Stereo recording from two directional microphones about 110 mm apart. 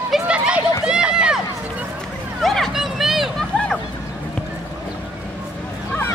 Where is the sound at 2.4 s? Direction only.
Centre (ahead or behind).